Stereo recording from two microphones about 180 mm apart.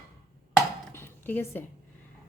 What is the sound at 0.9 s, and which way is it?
Zipper, 10° left (ahead or behind).